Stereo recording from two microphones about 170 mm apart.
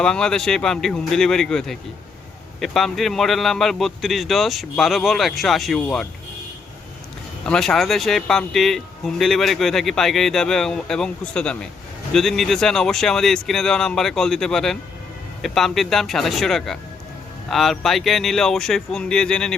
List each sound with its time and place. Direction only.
0.0 s a man's voice: 5° left (ahead or behind)
7.4 s a man's voice: 5° left (ahead or behind)